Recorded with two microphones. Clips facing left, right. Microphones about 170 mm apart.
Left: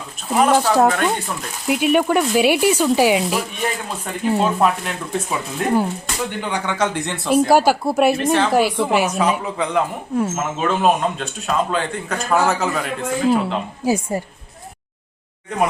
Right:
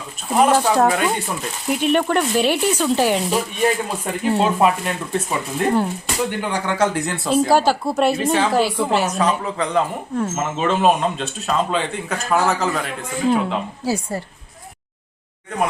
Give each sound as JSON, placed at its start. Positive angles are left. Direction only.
{"t": 0.3, "sound": "speech", "side_deg": -5}
{"t": 1.6, "sound": "speech", "side_deg": 5}
{"t": 7.3, "sound": "speech", "side_deg": 10}
{"t": 8.2, "sound": "speech", "side_deg": -10}
{"t": 8.5, "sound": "speech", "side_deg": 10}
{"t": 13.8, "sound": "speech", "side_deg": 15}